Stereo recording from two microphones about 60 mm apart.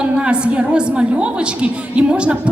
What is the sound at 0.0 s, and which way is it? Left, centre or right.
A woman's voice, centre.